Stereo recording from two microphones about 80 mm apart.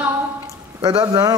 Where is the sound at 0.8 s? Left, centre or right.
Right.